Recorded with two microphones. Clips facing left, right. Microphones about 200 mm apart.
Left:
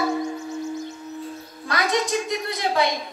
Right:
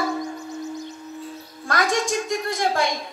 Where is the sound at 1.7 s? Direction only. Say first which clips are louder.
Even; 45° right (ahead or behind).